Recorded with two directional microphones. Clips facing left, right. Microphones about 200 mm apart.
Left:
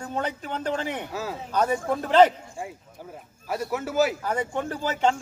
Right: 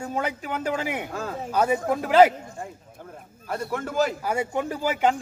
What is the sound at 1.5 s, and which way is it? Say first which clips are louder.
Speech: right 2 dB; 10° right (ahead or behind).